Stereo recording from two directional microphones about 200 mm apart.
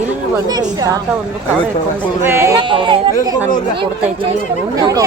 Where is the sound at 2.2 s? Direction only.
10° right (ahead or behind).